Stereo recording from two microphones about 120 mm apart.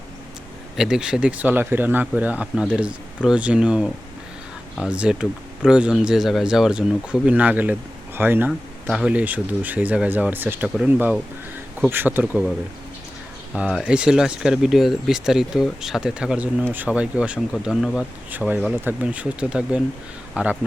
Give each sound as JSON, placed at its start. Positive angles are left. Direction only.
{"t": 0.8, "sound": "speech", "side_deg": -5}
{"t": 8.4, "sound": "speech", "side_deg": -5}
{"t": 13.5, "sound": "speech", "side_deg": -5}
{"t": 17.5, "sound": "speech", "side_deg": 0}
{"t": 18.3, "sound": "speech", "side_deg": -15}